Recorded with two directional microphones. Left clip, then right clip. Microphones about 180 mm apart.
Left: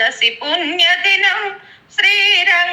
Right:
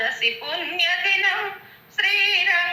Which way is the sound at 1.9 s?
40° left (ahead or behind).